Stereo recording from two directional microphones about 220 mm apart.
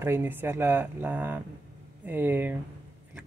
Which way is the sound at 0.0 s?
10° right (ahead or behind).